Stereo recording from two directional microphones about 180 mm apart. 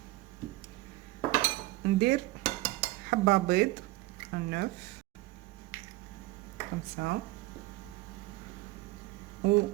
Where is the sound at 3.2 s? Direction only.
70° right (ahead or behind).